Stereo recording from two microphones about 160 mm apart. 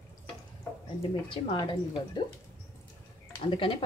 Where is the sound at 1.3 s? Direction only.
35° left (ahead or behind).